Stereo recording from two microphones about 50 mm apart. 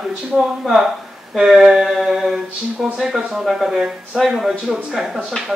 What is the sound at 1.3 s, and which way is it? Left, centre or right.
A man's voice, centre.